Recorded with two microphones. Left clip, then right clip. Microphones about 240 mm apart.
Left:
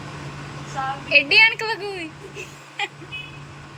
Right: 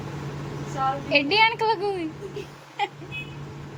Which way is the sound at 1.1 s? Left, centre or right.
Centre.